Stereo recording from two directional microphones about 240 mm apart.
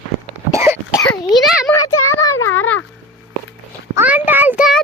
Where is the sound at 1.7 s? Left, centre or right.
Centre.